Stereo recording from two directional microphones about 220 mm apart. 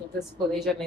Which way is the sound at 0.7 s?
Centre (ahead or behind).